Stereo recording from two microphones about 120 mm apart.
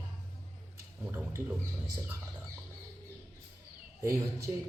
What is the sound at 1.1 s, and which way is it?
Speech, 20° right (ahead or behind).